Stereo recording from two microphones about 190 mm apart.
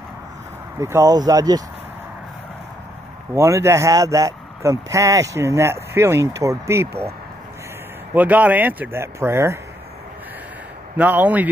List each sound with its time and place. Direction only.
0.7 s speech: 15° right (ahead or behind)
3.3 s speech: 15° right (ahead or behind)
11.0 s speech: 10° right (ahead or behind)